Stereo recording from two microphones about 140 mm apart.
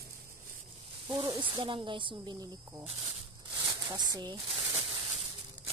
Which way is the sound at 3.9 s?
30° right (ahead or behind).